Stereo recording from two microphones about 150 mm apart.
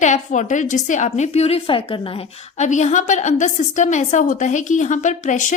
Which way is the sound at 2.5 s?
50° left (ahead or behind).